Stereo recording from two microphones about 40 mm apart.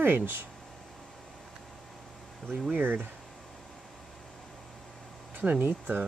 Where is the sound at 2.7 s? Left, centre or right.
Right.